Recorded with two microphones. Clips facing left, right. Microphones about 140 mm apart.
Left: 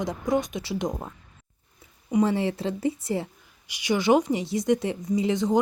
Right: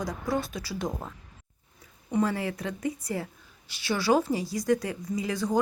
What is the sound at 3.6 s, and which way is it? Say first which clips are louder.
A woman's voice: left 4 dB; 15° left (ahead or behind).